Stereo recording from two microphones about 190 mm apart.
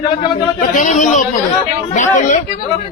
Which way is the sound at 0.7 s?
40° left (ahead or behind).